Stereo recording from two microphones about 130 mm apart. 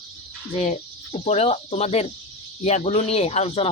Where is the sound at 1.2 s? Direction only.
50° left (ahead or behind).